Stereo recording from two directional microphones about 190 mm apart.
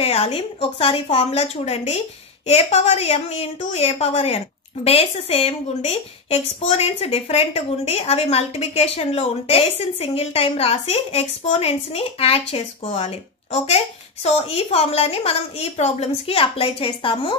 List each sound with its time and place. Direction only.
0.0 s a woman's voice: 30° left (ahead or behind)